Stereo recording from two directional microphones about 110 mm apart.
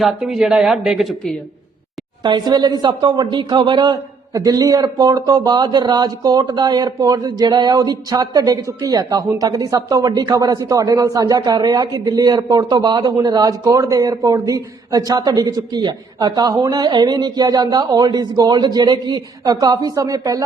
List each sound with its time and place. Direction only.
0.0 s speech: 5° right (ahead or behind)
2.2 s speech: 40° right (ahead or behind)